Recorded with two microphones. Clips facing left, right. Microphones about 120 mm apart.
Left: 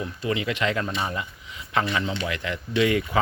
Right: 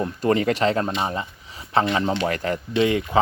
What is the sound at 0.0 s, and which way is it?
Speech, 45° right (ahead or behind).